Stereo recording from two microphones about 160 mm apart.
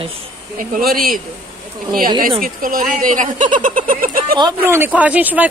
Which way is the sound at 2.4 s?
60° right (ahead or behind).